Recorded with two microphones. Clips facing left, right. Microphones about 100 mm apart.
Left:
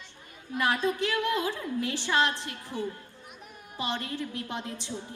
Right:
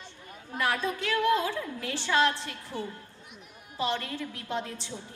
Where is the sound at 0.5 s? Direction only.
40° right (ahead or behind).